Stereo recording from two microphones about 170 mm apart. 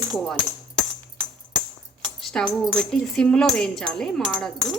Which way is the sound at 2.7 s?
5° left (ahead or behind).